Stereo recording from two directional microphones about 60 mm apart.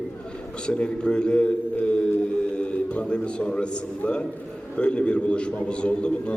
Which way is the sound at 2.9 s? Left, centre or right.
Centre.